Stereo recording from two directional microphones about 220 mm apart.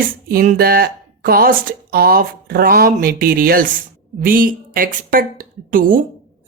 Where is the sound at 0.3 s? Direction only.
40° right (ahead or behind).